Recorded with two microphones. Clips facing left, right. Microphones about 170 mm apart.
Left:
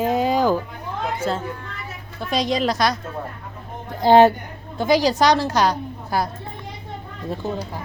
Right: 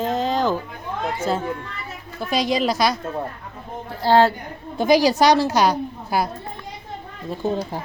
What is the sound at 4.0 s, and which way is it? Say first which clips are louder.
Speech: left 3 dB; 20° left (ahead or behind).